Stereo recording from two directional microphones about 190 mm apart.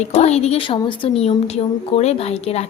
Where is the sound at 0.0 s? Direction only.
35° left (ahead or behind).